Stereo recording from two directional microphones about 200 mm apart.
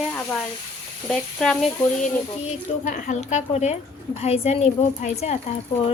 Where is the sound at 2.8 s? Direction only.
40° left (ahead or behind).